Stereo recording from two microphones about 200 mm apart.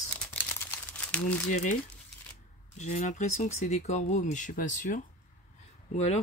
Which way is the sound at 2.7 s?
35° left (ahead or behind).